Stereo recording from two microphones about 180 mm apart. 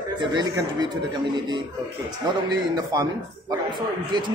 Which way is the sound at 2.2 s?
20° right (ahead or behind).